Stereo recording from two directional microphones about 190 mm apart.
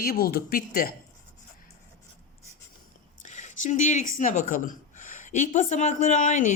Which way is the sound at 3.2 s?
40° left (ahead or behind).